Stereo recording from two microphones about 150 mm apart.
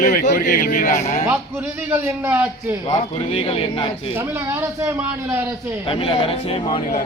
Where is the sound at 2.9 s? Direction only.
40° left (ahead or behind).